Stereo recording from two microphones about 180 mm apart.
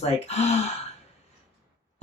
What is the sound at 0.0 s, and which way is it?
Speech, 35° left (ahead or behind).